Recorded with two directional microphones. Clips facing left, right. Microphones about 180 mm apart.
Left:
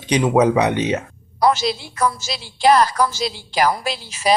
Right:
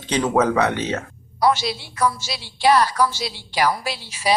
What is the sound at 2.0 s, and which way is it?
A woman's voice, 45° left (ahead or behind).